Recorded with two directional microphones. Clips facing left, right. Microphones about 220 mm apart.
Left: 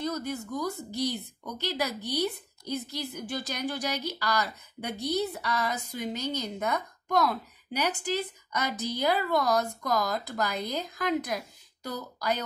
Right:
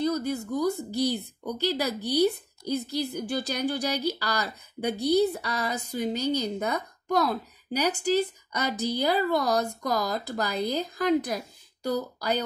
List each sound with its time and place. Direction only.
0.0 s speech: 30° right (ahead or behind)